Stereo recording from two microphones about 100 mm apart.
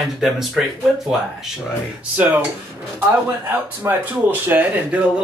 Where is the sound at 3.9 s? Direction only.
30° right (ahead or behind).